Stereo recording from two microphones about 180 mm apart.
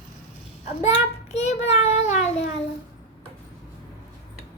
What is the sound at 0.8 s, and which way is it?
Child singing, 35° left (ahead or behind).